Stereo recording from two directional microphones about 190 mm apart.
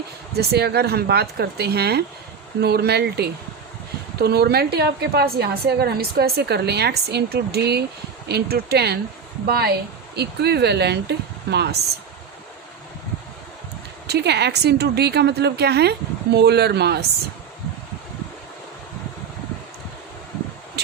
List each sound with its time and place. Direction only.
0.3 s a woman's voice: 60° right (ahead or behind)
14.1 s a woman's voice: 60° right (ahead or behind)
20.8 s a sound: 55° right (ahead or behind)